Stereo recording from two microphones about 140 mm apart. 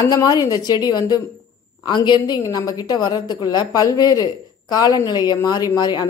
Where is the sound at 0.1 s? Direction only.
25° left (ahead or behind).